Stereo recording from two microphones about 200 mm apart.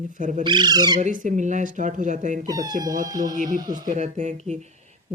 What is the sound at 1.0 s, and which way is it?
Speech, 40° right (ahead or behind).